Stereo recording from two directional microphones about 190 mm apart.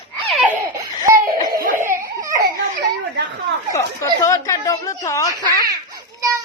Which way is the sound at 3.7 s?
15° left (ahead or behind).